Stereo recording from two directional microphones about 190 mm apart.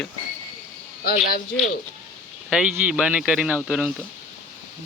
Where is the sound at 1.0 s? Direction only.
50° left (ahead or behind).